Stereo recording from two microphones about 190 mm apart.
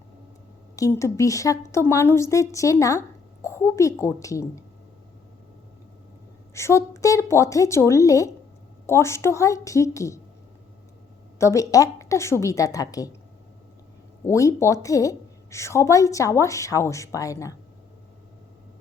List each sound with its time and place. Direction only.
0.8 s a woman's voice: 15° left (ahead or behind)
6.5 s a woman's voice: 15° left (ahead or behind)
11.3 s a woman's voice: 15° left (ahead or behind)
14.3 s a woman's voice: 15° left (ahead or behind)